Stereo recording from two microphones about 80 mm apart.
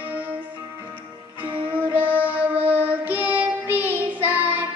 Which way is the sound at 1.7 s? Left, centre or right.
Right.